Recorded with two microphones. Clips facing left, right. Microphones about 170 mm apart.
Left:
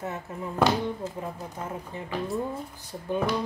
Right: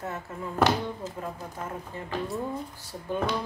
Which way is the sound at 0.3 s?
15° left (ahead or behind).